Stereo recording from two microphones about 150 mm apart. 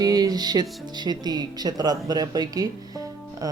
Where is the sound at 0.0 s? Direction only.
25° right (ahead or behind).